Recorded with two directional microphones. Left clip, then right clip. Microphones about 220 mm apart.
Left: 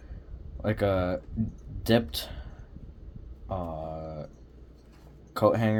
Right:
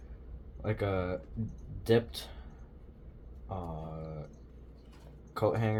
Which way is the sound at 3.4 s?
60° left (ahead or behind).